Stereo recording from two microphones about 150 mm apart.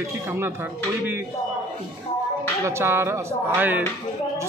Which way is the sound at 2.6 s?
15° right (ahead or behind).